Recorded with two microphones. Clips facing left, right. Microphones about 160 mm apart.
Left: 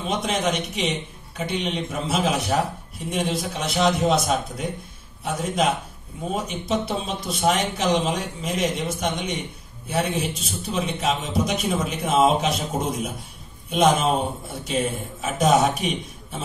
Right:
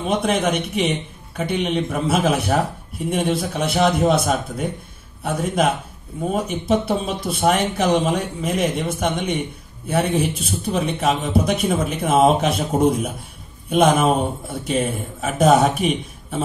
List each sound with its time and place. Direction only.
0.0 s a man's voice: 55° right (ahead or behind)